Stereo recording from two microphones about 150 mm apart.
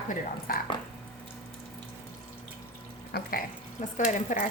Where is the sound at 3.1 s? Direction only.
75° left (ahead or behind).